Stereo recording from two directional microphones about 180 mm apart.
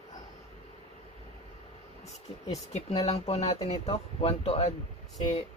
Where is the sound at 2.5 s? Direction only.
35° left (ahead or behind).